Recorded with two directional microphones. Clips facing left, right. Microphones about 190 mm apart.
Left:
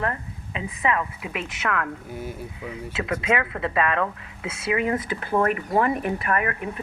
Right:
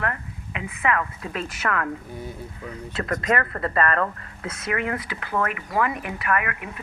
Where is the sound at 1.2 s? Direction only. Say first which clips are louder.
Right 1 dB; 5° left (ahead or behind).